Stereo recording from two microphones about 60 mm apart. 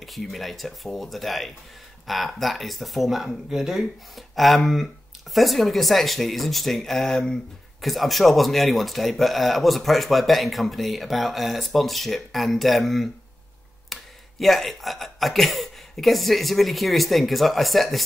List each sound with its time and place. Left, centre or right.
0.0 s a man's voice: centre
7.8 s a man's voice: centre
13.9 s a sound: centre
14.4 s a man's voice: centre